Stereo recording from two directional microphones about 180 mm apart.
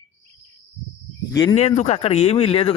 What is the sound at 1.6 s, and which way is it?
A man's voice, 35° left (ahead or behind).